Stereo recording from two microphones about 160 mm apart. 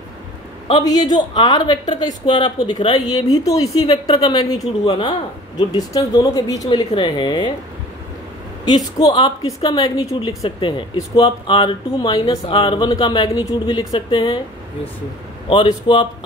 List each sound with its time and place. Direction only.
1.1 s a man's voice: 25° left (ahead or behind)
8.6 s speech: 25° left (ahead or behind)
15.5 s a man's voice: 30° left (ahead or behind)